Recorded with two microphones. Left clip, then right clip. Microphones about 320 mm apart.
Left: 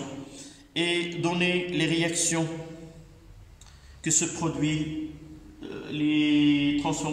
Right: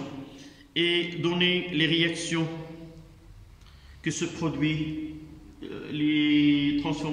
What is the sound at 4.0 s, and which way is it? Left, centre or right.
Speech, centre.